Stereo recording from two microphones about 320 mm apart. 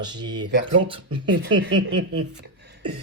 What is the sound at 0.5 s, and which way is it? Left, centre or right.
Speech, right.